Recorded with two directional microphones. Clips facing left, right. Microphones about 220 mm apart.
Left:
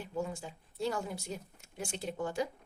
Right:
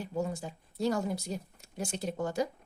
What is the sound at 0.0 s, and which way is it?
Speech, 40° right (ahead or behind).